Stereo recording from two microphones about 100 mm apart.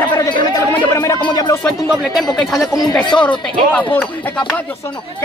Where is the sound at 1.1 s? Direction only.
40° left (ahead or behind).